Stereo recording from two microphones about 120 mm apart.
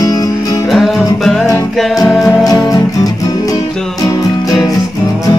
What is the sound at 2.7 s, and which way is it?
Music, 30° left (ahead or behind).